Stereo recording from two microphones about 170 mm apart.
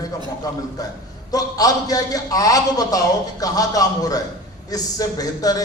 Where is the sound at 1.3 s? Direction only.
20° left (ahead or behind).